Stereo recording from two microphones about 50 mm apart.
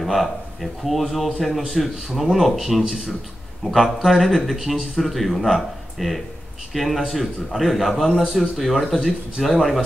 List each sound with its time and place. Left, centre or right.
0.0 s a man's voice: centre
8.1 s a man's voice: centre
8.4 s a man's voice: centre